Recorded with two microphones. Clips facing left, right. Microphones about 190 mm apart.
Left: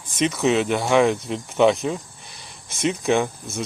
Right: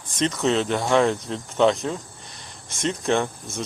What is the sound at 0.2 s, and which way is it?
Speech, 10° left (ahead or behind).